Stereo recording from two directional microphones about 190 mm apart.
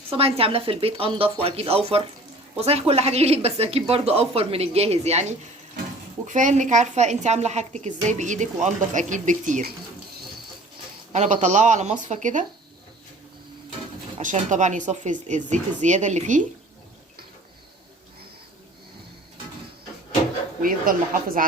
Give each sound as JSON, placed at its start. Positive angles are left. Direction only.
{"t": 0.1, "sound": "a woman's voice", "side_deg": -30}
{"t": 6.2, "sound": "a woman's voice", "side_deg": -40}
{"t": 11.1, "sound": "a woman's voice", "side_deg": -40}
{"t": 14.2, "sound": "a woman's voice", "side_deg": -40}
{"t": 20.6, "sound": "a woman's voice", "side_deg": -45}